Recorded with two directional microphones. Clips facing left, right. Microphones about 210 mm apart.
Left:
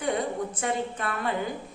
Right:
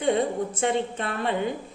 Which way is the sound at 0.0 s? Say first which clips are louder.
Right 4 dB; 25° right (ahead or behind).